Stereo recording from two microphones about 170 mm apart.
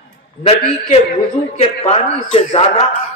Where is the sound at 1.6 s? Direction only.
35° left (ahead or behind).